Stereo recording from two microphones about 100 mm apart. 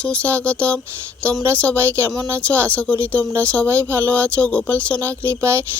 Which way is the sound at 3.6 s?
25° right (ahead or behind).